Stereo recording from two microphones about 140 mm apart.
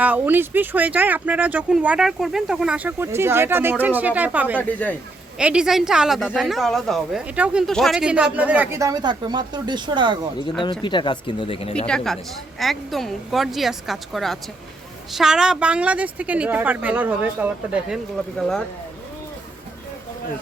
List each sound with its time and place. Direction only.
0.0 s speech: 10° right (ahead or behind)
4.8 s speech: 10° left (ahead or behind)
5.4 s a woman's voice: 5° right (ahead or behind)
7.7 s speech: centre (ahead or behind)
8.8 s speech: 30° right (ahead or behind)
10.6 s speech: 35° left (ahead or behind)
11.9 s a woman's voice: 5° left (ahead or behind)
18.3 s a woman's voice: 5° left (ahead or behind)